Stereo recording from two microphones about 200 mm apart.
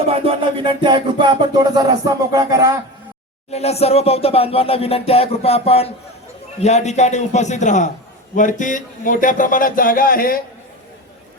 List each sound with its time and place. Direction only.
0.1 s music: 25° right (ahead or behind)
3.5 s music: 30° left (ahead or behind)
6.6 s a man's voice: 35° left (ahead or behind)